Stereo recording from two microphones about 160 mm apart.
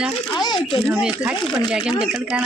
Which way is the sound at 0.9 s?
5° right (ahead or behind).